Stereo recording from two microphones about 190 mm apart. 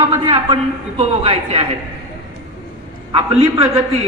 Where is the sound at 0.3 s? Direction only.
25° right (ahead or behind).